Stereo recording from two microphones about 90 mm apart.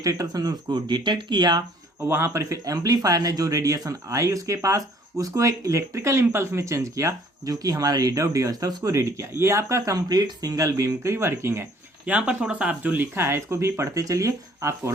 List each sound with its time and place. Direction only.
0.0 s speech: 40° right (ahead or behind)
2.0 s speech: 25° right (ahead or behind)
12.0 s speech: 15° right (ahead or behind); by 14.9 s 35° right (ahead or behind)